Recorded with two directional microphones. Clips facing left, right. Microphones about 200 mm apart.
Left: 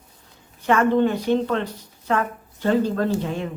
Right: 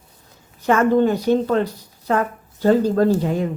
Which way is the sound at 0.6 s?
40° right (ahead or behind).